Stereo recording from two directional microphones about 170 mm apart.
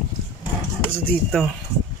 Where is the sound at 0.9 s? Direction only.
5° left (ahead or behind).